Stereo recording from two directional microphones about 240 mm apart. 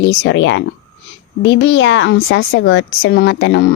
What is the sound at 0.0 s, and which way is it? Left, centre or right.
A woman's voice, left.